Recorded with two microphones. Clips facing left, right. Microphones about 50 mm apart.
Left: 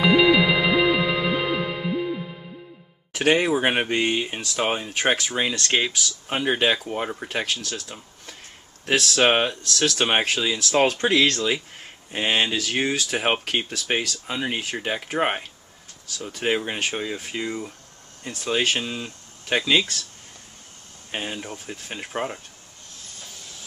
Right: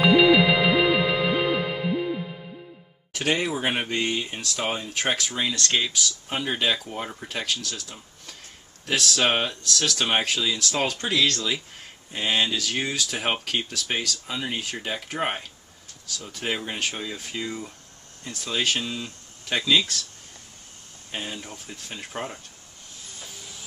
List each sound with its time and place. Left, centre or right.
0.0 s music: centre
3.2 s speech: left
8.9 s speech: left
11.2 s speech: left
21.1 s speech: left
23.1 s vehicle: centre